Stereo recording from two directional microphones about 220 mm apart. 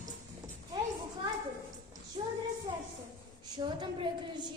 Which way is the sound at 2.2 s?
25° right (ahead or behind).